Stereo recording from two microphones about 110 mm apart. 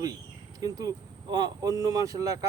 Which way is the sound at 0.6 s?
35° right (ahead or behind).